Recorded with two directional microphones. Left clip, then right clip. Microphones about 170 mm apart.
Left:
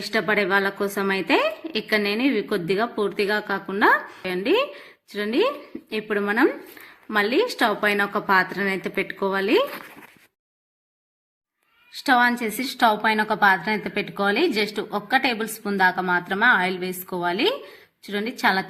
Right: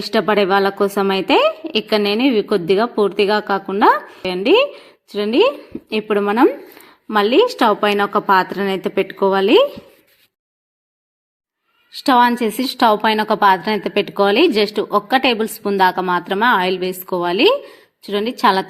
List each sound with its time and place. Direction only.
0.0 s a woman's voice: 30° right (ahead or behind)
12.0 s a woman's voice: 30° right (ahead or behind)